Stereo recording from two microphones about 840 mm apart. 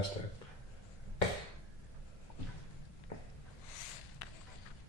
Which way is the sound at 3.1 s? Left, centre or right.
Left.